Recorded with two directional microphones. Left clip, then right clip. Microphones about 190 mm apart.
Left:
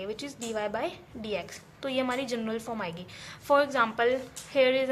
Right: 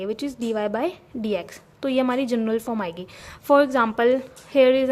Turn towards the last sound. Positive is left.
turn(degrees=-45)  # may be behind; listen again after turning